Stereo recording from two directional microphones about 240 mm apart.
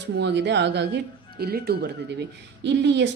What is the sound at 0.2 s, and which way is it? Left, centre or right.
Speech, right.